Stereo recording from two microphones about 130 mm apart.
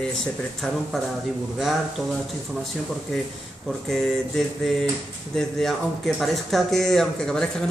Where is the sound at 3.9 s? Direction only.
Centre (ahead or behind).